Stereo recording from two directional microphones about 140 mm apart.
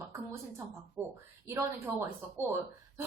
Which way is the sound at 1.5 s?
20° right (ahead or behind).